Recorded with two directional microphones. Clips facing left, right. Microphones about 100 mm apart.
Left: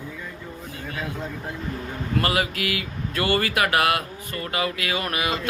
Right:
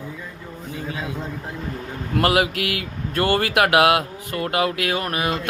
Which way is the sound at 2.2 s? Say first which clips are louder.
Right 7 dB; 70° right (ahead or behind).